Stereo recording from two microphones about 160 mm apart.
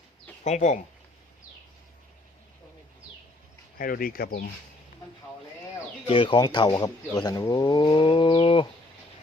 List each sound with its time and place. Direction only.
0.4 s speech: 45° left (ahead or behind)
3.8 s speech: 65° left (ahead or behind)
6.1 s speech: 30° left (ahead or behind)